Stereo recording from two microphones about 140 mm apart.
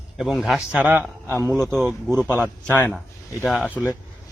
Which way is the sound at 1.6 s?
Centre (ahead or behind).